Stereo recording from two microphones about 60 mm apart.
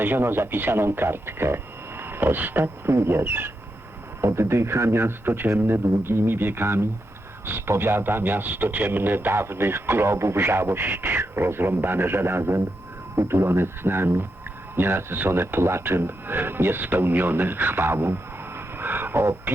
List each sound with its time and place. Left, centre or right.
0.0 s speech: right